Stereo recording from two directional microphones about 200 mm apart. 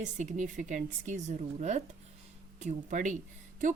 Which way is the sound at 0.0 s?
40° right (ahead or behind).